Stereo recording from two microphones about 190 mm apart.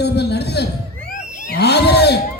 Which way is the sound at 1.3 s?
50° left (ahead or behind).